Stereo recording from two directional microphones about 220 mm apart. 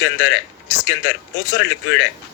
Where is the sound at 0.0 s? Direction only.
60° left (ahead or behind).